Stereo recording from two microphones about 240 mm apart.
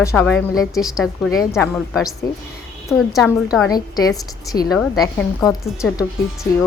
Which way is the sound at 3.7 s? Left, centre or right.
Centre.